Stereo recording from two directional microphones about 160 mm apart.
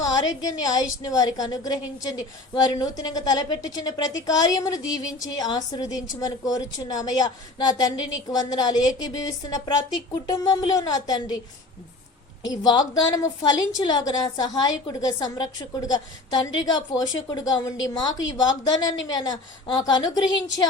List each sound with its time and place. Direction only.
0.0 s a woman's voice: 25° left (ahead or behind)
12.5 s a woman's voice: 25° left (ahead or behind)